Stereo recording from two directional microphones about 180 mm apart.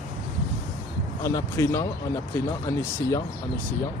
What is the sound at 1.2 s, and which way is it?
Speech, 15° left (ahead or behind).